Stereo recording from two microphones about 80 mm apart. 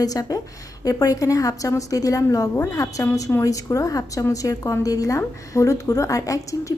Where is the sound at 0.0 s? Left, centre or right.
Left.